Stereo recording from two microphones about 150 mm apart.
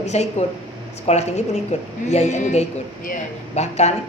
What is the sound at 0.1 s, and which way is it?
A woman's voice, 45° left (ahead or behind).